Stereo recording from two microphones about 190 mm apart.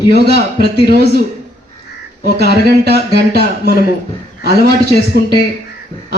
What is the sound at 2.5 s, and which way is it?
Speech, 60° right (ahead or behind).